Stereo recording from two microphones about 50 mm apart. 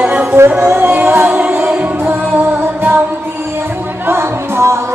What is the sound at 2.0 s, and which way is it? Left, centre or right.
Music, right.